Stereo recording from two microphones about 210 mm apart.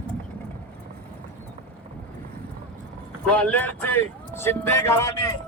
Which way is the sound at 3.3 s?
5° left (ahead or behind).